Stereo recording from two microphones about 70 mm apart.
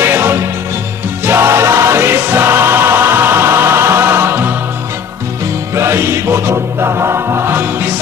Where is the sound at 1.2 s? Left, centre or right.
Right.